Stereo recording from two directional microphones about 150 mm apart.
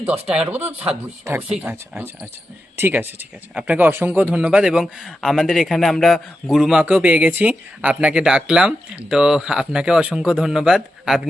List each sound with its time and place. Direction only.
0.3 s a man's voice: 10° right (ahead or behind)